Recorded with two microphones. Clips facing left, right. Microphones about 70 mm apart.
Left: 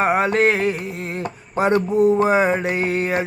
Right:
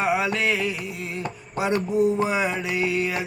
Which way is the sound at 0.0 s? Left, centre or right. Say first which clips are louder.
Left 6 dB; left.